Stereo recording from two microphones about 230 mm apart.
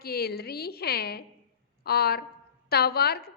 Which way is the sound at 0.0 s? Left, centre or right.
Left.